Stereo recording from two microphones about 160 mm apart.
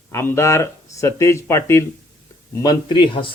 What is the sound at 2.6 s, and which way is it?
Speech, 25° left (ahead or behind).